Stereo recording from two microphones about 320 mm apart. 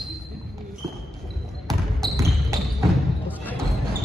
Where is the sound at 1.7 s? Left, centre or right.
Centre.